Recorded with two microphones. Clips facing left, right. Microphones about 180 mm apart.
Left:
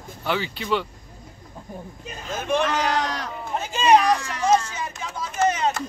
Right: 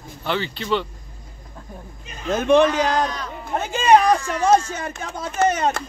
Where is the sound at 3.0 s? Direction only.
80° left.